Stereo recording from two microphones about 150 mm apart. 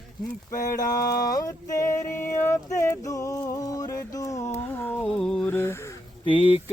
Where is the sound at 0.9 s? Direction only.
25° left (ahead or behind).